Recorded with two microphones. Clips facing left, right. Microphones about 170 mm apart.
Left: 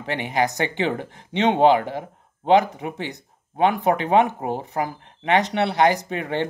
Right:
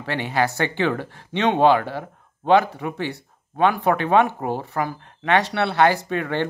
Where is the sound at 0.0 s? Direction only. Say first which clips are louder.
Even; 20° left (ahead or behind).